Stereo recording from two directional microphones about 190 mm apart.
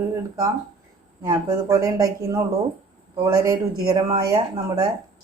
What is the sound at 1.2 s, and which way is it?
A woman's voice, 15° right (ahead or behind).